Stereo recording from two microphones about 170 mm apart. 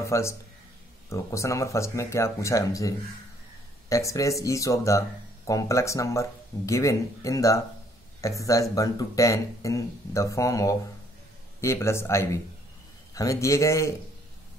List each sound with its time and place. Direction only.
0.0 s speech: 15° left (ahead or behind)
3.9 s speech: 20° left (ahead or behind)